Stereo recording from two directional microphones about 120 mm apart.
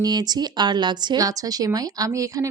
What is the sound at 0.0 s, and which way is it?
Speech, 35° right (ahead or behind).